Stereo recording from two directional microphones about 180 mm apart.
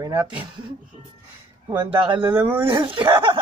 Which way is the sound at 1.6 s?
25° right (ahead or behind).